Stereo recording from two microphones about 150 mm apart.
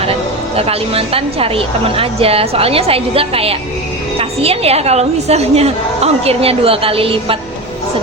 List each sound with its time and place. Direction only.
0.5 s a woman's voice: 40° right (ahead or behind)